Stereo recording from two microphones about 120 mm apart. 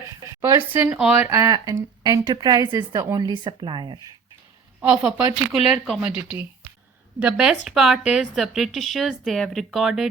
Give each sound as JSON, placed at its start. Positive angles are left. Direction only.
{"t": 0.4, "sound": "speech", "side_deg": -20}
{"t": 1.3, "sound": "speech", "side_deg": -25}
{"t": 4.8, "sound": "a woman's voice", "side_deg": -10}